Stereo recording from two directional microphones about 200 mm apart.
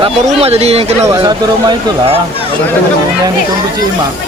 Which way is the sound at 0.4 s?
30° right (ahead or behind).